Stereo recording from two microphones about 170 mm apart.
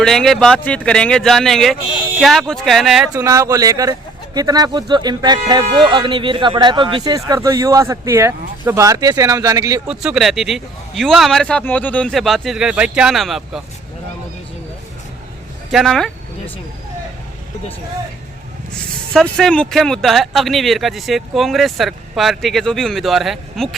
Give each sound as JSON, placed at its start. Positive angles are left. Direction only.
{"t": 0.0, "sound": "speech", "side_deg": 0}
{"t": 3.2, "sound": "speech", "side_deg": -15}
{"t": 9.9, "sound": "speech", "side_deg": -5}
{"t": 15.7, "sound": "speech", "side_deg": 0}
{"t": 18.7, "sound": "speech", "side_deg": 5}